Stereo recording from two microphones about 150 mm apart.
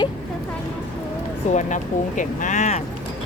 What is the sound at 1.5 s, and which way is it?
Speech, 55° left (ahead or behind).